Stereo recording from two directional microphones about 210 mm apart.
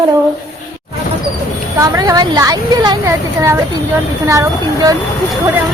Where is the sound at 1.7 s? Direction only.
15° right (ahead or behind).